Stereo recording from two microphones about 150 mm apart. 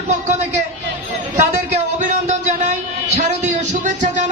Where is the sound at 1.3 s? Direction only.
50° right (ahead or behind).